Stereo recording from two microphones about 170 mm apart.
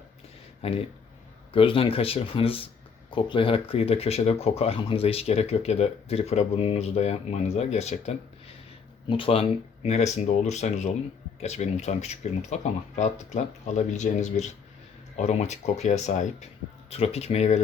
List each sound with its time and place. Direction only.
0.6 s speech: 35° left (ahead or behind)